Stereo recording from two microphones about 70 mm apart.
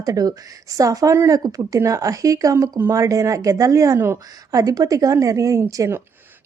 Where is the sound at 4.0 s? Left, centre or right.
Right.